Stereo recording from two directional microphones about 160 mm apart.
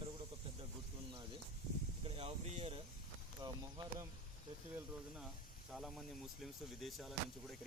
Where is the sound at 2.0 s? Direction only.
40° right (ahead or behind).